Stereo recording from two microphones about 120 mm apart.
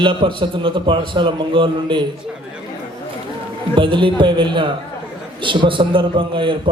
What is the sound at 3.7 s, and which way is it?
A man's voice, 45° right (ahead or behind).